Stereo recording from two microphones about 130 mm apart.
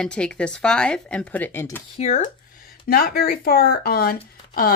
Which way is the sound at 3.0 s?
90° left.